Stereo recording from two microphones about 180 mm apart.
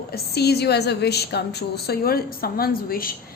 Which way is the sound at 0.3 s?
65° left (ahead or behind).